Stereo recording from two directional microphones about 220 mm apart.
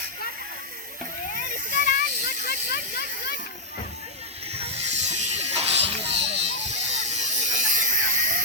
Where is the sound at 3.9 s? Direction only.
30° right (ahead or behind).